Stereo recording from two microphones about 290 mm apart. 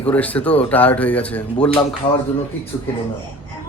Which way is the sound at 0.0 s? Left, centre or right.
Centre.